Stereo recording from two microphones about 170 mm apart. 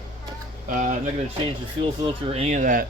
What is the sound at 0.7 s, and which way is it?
Speech, 50° right (ahead or behind).